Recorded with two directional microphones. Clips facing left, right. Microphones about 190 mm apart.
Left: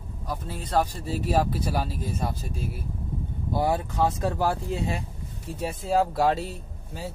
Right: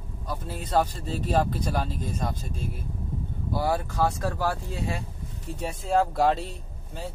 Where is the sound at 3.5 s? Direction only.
20° left (ahead or behind).